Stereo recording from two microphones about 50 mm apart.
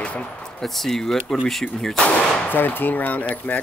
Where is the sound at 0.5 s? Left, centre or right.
Centre.